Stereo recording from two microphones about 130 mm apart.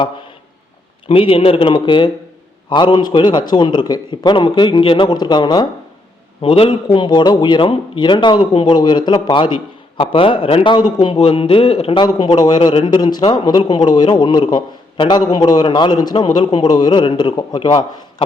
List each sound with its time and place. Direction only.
1.0 s a man's voice: 45° left (ahead or behind)
6.4 s a man's voice: 45° left (ahead or behind)
11.0 s speech: 45° left (ahead or behind)
11.9 s a man's voice: 35° left (ahead or behind)